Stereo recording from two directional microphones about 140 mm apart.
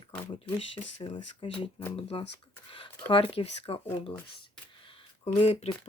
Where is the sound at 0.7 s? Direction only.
35° left (ahead or behind).